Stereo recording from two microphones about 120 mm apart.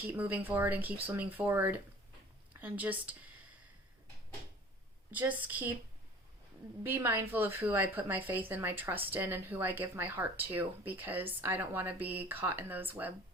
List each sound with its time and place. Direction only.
0.1 s a woman's voice: 15° right (ahead or behind)
5.1 s a woman's voice: 15° right (ahead or behind)
6.8 s a woman's voice: 20° right (ahead or behind)